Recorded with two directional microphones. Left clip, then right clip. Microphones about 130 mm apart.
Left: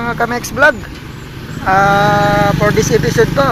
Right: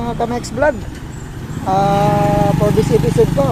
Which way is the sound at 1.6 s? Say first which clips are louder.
Left 4 dB; 10° left (ahead or behind).